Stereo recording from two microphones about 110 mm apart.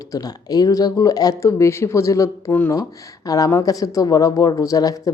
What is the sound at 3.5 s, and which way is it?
Speech, 35° left (ahead or behind).